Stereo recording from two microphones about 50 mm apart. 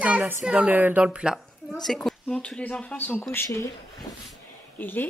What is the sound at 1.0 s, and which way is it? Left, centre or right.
Speech, right.